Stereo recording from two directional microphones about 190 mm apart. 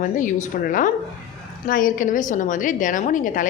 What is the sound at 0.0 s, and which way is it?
A woman's voice, 40° left (ahead or behind).